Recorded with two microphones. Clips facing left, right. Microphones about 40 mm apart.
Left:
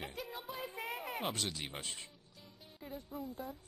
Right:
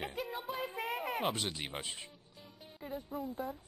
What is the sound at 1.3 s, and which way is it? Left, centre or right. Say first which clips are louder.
Speech: right 2 dB; centre.